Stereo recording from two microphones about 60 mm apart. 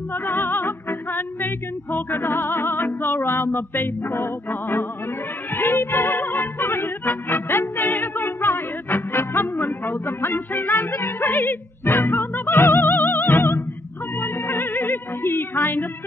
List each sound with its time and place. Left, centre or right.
0.1 s music: left